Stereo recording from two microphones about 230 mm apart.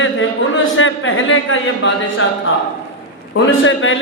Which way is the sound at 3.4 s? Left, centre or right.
Left.